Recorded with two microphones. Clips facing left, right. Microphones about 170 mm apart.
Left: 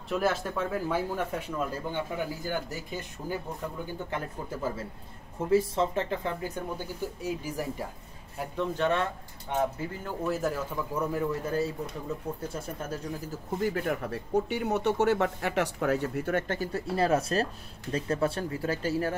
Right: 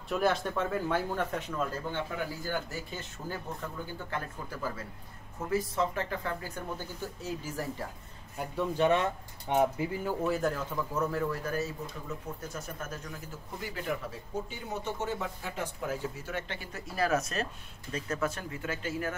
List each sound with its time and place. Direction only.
0.1 s speech: 5° left (ahead or behind)
8.4 s speech: centre (ahead or behind)
8.7 s speech: 15° right (ahead or behind)
10.2 s speech: centre (ahead or behind); by 13.0 s 30° left (ahead or behind)
13.6 s speech: 55° left (ahead or behind)
16.9 s speech: 30° left (ahead or behind)